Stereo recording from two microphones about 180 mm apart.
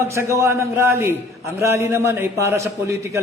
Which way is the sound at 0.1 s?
15° right (ahead or behind).